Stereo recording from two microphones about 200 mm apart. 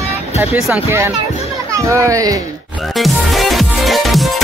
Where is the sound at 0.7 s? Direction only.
10° right (ahead or behind).